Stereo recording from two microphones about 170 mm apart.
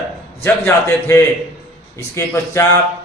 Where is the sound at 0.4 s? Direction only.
15° left (ahead or behind).